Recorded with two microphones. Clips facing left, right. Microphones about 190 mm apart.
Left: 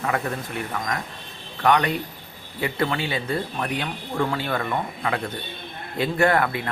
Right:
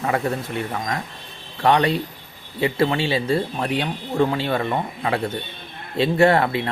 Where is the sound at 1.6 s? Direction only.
25° right (ahead or behind).